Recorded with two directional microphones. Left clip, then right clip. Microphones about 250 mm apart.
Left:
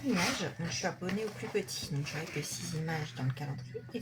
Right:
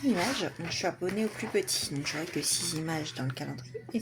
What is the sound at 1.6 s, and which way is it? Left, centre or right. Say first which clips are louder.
Speech: right 7 dB; right.